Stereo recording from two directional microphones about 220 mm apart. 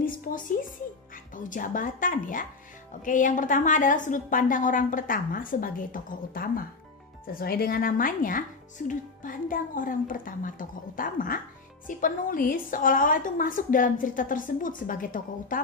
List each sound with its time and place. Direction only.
0.0 s speech: 40° left (ahead or behind)